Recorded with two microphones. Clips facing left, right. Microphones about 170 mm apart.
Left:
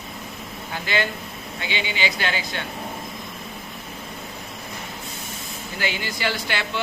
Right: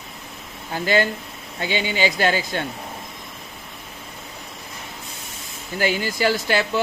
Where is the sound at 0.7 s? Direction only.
40° right (ahead or behind).